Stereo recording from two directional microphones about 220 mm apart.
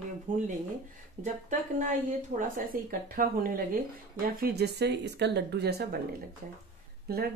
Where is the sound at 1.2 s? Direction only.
35° right (ahead or behind).